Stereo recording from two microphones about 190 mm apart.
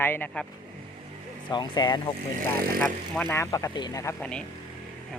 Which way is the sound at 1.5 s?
25° left (ahead or behind).